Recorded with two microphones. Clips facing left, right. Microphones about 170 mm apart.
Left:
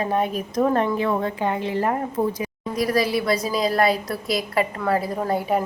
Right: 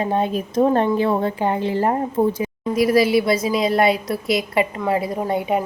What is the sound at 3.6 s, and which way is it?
Speech, 25° right (ahead or behind).